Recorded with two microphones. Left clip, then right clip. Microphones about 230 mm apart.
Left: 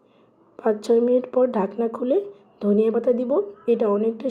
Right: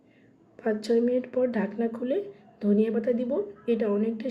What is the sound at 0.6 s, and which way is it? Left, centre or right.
A woman's voice, centre.